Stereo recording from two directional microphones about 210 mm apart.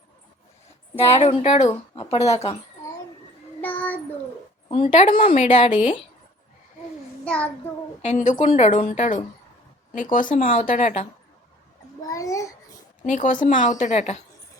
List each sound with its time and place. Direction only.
0.9 s speech: 30° left (ahead or behind)
3.6 s child singing: 10° left (ahead or behind)
4.7 s speech: 30° left (ahead or behind)
8.0 s speech: 35° left (ahead or behind)
12.0 s babbling: 15° left (ahead or behind)
13.1 s speech: 40° left (ahead or behind)